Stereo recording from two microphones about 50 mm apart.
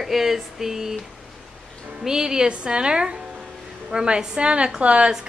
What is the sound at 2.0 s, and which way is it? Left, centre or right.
Speech, centre.